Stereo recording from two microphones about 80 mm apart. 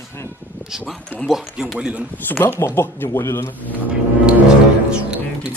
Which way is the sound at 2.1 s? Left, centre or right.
Left.